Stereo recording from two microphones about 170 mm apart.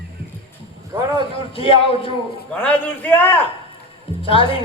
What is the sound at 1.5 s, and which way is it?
Speech, 35° left (ahead or behind).